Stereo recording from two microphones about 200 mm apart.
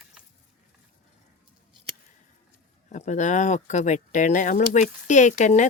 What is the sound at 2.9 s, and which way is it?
Speech, 35° left (ahead or behind).